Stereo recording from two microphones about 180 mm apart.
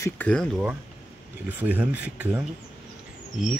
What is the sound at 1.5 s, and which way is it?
Speech, 10° right (ahead or behind).